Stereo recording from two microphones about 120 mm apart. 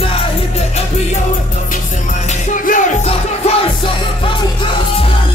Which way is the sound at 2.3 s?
80° left.